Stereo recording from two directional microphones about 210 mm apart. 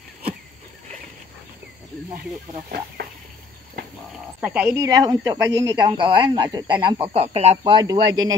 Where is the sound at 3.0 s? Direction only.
45° right (ahead or behind).